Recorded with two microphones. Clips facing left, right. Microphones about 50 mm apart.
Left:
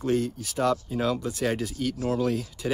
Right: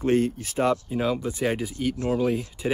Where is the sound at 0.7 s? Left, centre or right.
Centre.